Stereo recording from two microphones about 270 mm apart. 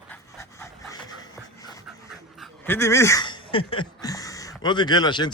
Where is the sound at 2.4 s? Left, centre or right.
Centre.